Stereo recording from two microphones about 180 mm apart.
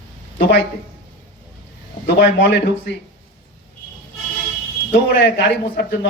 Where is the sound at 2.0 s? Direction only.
70° left (ahead or behind).